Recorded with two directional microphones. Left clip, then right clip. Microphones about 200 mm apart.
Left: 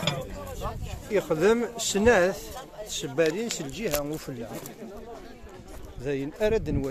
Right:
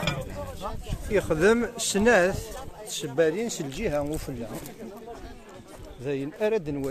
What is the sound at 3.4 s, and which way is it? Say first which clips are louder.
Speech: right 1 dB; 15° right (ahead or behind).